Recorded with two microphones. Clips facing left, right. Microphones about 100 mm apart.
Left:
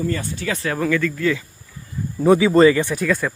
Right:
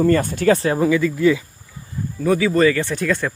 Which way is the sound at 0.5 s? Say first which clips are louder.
Right 5 dB; 30° right (ahead or behind).